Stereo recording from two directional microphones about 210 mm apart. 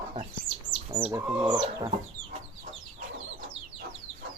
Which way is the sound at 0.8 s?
25° right (ahead or behind).